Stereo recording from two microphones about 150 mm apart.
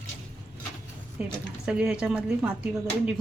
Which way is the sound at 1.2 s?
10° right (ahead or behind).